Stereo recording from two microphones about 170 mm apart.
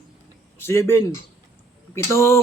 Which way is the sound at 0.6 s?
15° left (ahead or behind).